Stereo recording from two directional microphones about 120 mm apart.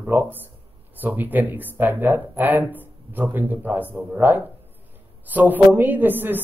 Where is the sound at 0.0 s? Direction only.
15° right (ahead or behind).